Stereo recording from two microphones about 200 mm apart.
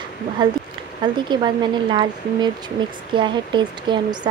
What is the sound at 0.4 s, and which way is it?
Speech, 25° right (ahead or behind).